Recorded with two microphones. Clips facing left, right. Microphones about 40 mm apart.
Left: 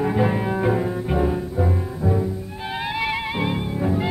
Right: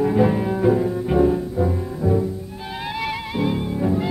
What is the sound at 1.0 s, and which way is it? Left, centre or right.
Music, centre.